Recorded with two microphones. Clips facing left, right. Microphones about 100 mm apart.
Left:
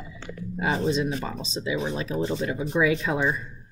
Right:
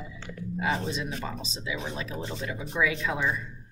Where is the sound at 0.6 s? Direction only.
25° left (ahead or behind).